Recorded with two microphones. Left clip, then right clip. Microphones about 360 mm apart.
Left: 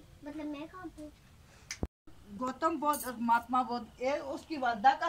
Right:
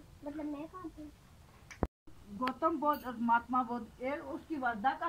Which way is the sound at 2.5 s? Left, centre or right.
Centre.